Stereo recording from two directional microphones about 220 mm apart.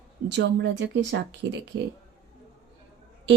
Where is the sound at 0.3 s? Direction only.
50° right (ahead or behind).